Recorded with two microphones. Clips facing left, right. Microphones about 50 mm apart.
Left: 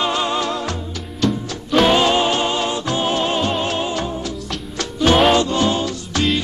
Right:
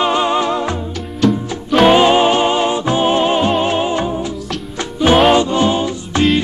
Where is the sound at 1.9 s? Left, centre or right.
Right.